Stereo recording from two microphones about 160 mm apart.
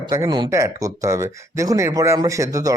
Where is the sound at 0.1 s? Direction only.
25° right (ahead or behind).